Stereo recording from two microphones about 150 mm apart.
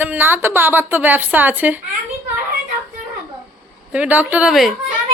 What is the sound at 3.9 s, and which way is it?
Speech, 10° right (ahead or behind).